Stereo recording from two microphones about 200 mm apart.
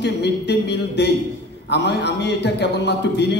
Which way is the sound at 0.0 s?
55° left (ahead or behind).